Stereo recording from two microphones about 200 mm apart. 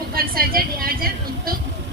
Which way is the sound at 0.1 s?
45° right (ahead or behind).